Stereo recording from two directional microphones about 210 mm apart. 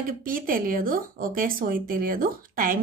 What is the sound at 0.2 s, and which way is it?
A woman's voice, 40° right (ahead or behind).